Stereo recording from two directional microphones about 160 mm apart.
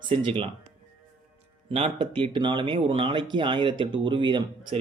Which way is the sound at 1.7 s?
35° right (ahead or behind).